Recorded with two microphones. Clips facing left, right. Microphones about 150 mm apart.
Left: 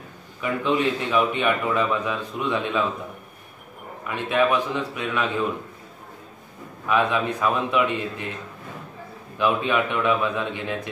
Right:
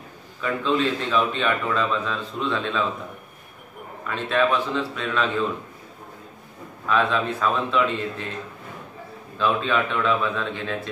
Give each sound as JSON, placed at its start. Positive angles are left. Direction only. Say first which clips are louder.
{"t": 0.4, "sound": "a man's voice", "louder": "even", "side_deg": 15}
{"t": 4.1, "sound": "a man's voice", "louder": "left 1 dB", "side_deg": 15}
{"t": 6.9, "sound": "a man's voice", "louder": "even", "side_deg": 15}
{"t": 9.4, "sound": "a man's voice", "louder": "left 1 dB", "side_deg": 15}